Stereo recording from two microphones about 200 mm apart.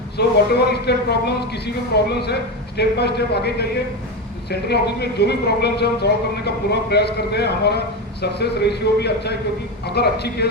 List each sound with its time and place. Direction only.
0.2 s a man's voice: 55° left (ahead or behind)